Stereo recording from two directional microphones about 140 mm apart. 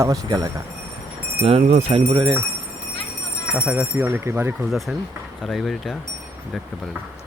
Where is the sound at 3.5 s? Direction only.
10° right (ahead or behind).